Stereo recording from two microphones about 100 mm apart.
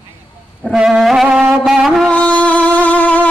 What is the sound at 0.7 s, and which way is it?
Music, 5° right (ahead or behind).